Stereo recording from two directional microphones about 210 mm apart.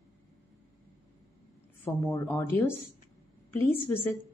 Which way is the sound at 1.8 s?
15° left (ahead or behind).